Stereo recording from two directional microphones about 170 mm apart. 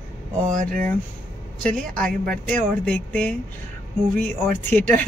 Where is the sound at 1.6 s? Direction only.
5° left (ahead or behind).